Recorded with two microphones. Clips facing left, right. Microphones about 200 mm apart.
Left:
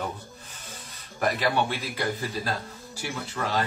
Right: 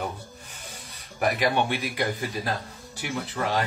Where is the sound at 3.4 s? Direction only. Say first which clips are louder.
Right 2 dB; 25° right (ahead or behind).